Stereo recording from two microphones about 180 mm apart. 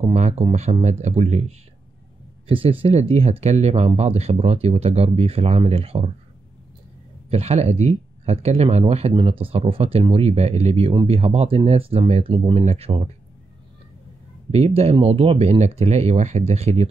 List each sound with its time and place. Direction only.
0.0 s speech: 40° right (ahead or behind)
2.4 s speech: 30° right (ahead or behind)
7.2 s speech: 35° right (ahead or behind)
14.5 s speech: 35° right (ahead or behind)